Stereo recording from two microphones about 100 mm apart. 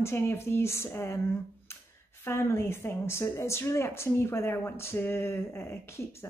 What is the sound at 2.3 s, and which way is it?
Speech, 25° left (ahead or behind).